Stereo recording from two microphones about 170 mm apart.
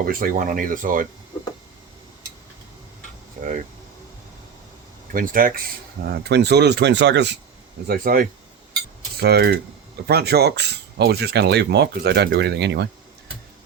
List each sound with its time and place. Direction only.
0.0 s speech: 60° right (ahead or behind)
5.1 s speech: 55° right (ahead or behind)
6.2 s speech: 80° right
7.9 s speech: 60° right (ahead or behind)
9.2 s speech: 70° right (ahead or behind)